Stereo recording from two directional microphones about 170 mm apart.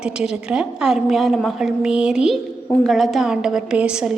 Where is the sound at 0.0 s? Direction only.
5° right (ahead or behind).